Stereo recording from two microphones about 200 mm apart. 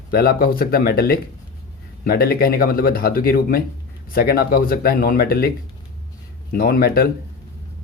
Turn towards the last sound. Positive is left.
turn(degrees=50)  # may be behind; listen again after turning